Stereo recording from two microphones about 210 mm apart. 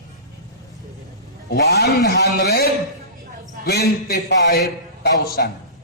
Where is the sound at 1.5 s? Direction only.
50° left (ahead or behind).